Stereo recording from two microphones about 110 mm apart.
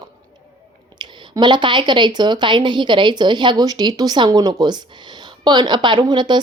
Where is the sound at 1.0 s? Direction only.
45° right (ahead or behind).